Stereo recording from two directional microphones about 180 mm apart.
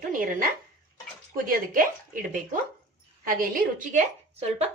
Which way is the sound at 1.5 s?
50° right (ahead or behind).